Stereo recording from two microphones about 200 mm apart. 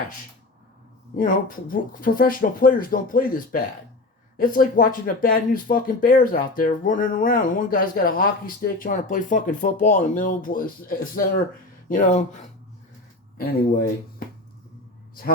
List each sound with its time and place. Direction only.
1.1 s speech: 40° left (ahead or behind)